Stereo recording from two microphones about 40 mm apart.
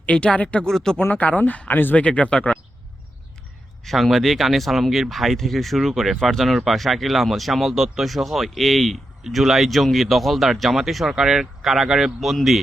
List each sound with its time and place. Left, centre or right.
0.0 s speech: left
0.7 s speech: centre
1.2 s speech: left
2.0 s speech: left
3.8 s speech: centre